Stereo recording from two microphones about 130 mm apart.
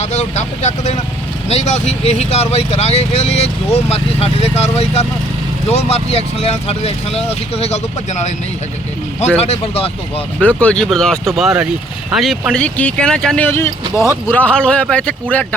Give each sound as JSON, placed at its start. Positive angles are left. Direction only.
{"t": 0.0, "sound": "speech", "side_deg": 65}
{"t": 9.4, "sound": "speech", "side_deg": 50}
{"t": 10.4, "sound": "speech", "side_deg": 10}